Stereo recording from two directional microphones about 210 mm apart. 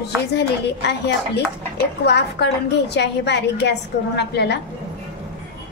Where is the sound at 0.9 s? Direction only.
55° left (ahead or behind).